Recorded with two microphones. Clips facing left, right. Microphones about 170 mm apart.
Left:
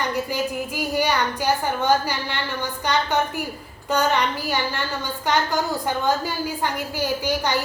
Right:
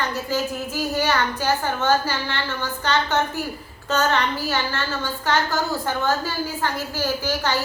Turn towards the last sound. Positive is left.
turn(degrees=15)  # may be behind; listen again after turning